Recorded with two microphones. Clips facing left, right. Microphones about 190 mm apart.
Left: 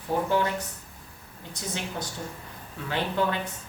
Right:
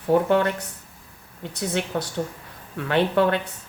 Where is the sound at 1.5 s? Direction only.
65° right (ahead or behind).